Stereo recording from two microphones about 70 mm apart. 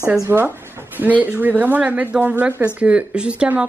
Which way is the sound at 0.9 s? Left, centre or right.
Right.